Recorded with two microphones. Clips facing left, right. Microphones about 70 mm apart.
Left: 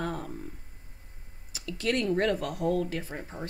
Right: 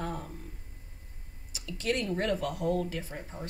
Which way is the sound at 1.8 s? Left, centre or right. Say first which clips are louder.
Left 4 dB; left.